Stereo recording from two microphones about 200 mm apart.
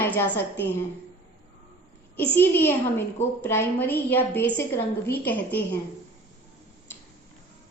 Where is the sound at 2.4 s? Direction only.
10° left (ahead or behind).